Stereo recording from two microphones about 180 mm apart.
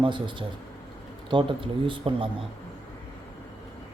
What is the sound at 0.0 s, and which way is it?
Speech, 25° right (ahead or behind).